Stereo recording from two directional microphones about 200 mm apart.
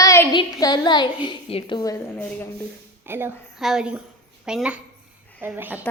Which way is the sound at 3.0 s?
10° right (ahead or behind).